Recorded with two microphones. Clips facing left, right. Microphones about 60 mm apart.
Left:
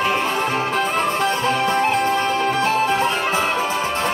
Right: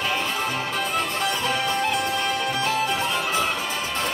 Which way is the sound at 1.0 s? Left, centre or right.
Left.